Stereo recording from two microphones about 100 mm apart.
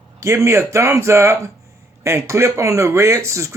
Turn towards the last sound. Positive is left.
turn(degrees=-30)  # may be behind; listen again after turning